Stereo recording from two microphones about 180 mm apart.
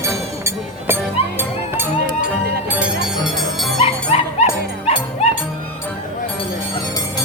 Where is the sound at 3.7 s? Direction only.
35° left (ahead or behind).